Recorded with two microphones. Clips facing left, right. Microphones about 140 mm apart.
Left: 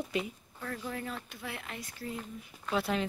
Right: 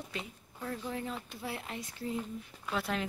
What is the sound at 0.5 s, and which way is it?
Speech, 20° right (ahead or behind).